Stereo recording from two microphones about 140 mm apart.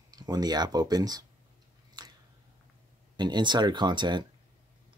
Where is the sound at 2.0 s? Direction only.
30° right (ahead or behind).